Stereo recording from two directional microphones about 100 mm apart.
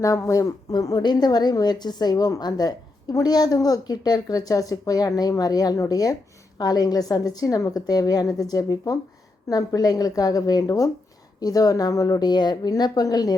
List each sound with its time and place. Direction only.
0.0 s a woman's voice: 35° left (ahead or behind)